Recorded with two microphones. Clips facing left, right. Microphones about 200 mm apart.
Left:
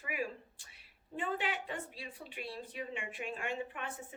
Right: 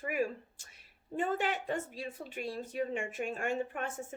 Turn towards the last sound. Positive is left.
turn(degrees=-45)  # may be behind; listen again after turning